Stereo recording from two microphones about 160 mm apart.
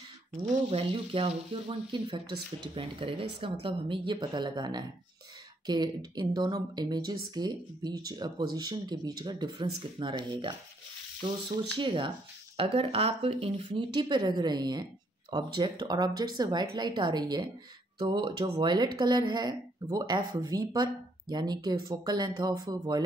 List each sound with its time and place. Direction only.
0.7 s speech: 35° right (ahead or behind)